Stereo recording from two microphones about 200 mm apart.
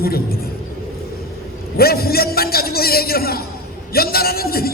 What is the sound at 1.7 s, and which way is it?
A man's voice, 50° left (ahead or behind).